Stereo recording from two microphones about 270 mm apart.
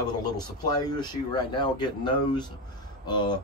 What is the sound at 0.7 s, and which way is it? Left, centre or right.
Speech, centre.